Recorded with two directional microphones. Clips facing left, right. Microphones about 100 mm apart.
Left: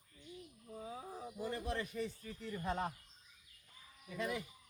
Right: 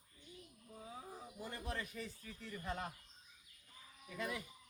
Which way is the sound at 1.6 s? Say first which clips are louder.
Left 1 dB; 30° left (ahead or behind).